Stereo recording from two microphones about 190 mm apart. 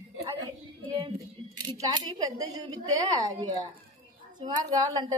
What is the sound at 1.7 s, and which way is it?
A woman's voice, 20° right (ahead or behind).